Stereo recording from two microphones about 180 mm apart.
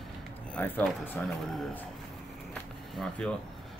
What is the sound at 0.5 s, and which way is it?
Speech, 10° left (ahead or behind).